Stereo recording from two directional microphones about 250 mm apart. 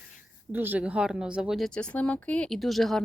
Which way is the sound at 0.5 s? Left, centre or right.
Centre.